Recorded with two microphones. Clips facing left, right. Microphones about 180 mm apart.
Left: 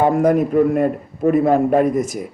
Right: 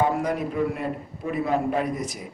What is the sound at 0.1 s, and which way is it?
A man's voice, 50° left (ahead or behind).